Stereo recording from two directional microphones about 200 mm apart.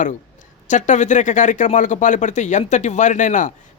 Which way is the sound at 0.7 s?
35° left (ahead or behind).